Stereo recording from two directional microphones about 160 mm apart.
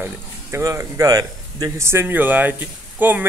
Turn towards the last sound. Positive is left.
turn(degrees=-10)  # may be behind; listen again after turning